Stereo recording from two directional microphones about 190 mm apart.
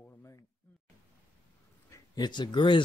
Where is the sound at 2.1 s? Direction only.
25° left (ahead or behind).